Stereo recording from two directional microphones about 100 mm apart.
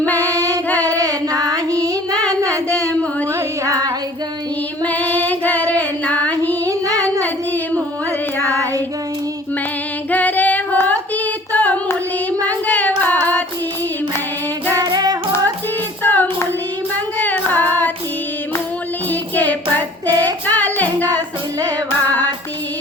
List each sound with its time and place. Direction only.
0.8 s child singing: 35° right (ahead or behind)
2.3 s a sound: 35° right (ahead or behind)
2.6 s a sound: 10° left (ahead or behind)
3.7 s female singing: 35° right (ahead or behind)
4.8 s female singing: 15° left (ahead or behind)
6.7 s music: 35° right (ahead or behind)
10.1 s female singing: 15° left (ahead or behind)
11.5 s singing: 15° left (ahead or behind)
12.5 s child singing: 15° left (ahead or behind)
14.7 s singing: 40° right (ahead or behind)
16.0 s child singing: 20° left (ahead or behind)
19.4 s child singing: 15° left (ahead or behind)